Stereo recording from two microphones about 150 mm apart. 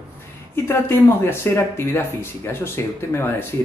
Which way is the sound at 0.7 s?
15° left (ahead or behind).